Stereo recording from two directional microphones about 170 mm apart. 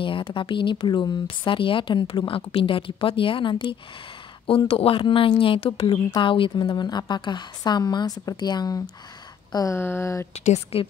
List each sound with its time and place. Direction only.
0.0 s a woman's voice: 30° left (ahead or behind)
10.3 s a woman's voice: 40° left (ahead or behind)